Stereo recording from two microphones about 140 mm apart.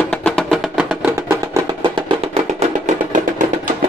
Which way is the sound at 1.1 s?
20° right (ahead or behind).